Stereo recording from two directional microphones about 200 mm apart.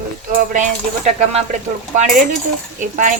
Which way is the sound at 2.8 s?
40° right (ahead or behind).